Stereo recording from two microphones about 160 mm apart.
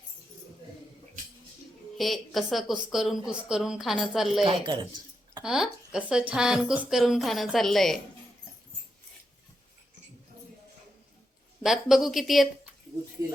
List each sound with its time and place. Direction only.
2.0 s speech: centre (ahead or behind)
4.4 s speech: 30° right (ahead or behind)
5.4 s speech: 5° right (ahead or behind)
11.6 s speech: centre (ahead or behind)